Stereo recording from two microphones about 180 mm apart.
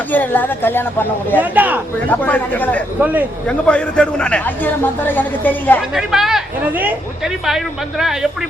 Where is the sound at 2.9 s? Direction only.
10° right (ahead or behind).